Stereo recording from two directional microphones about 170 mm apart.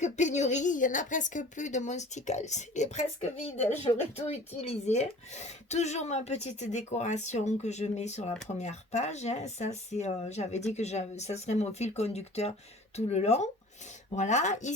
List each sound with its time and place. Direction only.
0.0 s speech: 45° left (ahead or behind)